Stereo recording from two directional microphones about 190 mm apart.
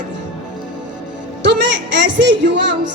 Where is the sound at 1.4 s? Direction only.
70° right (ahead or behind).